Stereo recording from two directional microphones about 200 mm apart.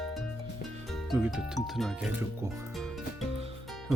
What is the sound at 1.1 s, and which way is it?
Speech, 5° right (ahead or behind).